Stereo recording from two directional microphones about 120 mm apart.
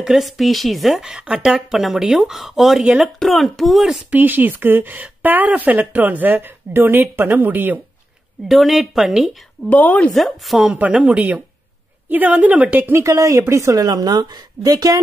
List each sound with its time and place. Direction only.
0.0 s speech: centre (ahead or behind)
4.1 s speech: 15° right (ahead or behind)
8.5 s speech: centre (ahead or behind)
9.7 s speech: 15° left (ahead or behind)
10.1 s speech: centre (ahead or behind); by 13.0 s 15° right (ahead or behind)
13.0 s a woman's voice: 25° right (ahead or behind)